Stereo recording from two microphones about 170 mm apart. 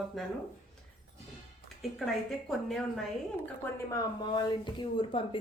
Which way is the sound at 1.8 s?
Centre (ahead or behind).